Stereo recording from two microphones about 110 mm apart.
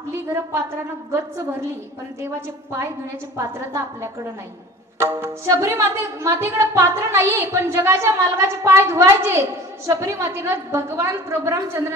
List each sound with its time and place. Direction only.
0.3 s speech: 25° right (ahead or behind)
3.3 s speech: 25° right (ahead or behind)